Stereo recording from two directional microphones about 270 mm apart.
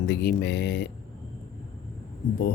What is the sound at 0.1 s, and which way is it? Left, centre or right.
Speech, left.